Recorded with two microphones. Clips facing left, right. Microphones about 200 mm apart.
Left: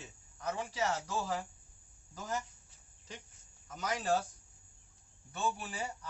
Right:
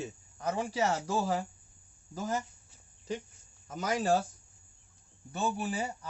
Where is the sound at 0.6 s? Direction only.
45° right (ahead or behind).